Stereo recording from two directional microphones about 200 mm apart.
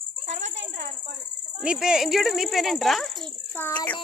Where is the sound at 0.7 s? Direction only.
40° right (ahead or behind).